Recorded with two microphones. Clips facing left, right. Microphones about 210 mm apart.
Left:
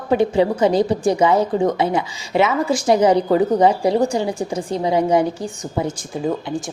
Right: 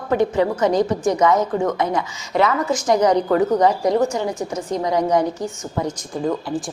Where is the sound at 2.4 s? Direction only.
10° left (ahead or behind).